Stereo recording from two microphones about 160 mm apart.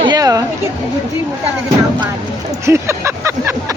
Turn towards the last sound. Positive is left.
turn(degrees=-15)  # may be behind; listen again after turning